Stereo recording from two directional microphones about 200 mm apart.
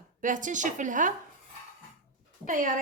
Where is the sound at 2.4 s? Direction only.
40° right (ahead or behind).